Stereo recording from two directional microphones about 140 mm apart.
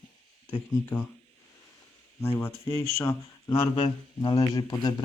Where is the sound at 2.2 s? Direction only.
15° left (ahead or behind).